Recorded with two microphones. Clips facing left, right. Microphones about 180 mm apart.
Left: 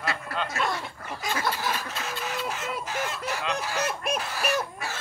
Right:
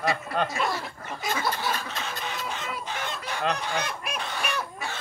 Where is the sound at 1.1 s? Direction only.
Centre (ahead or behind).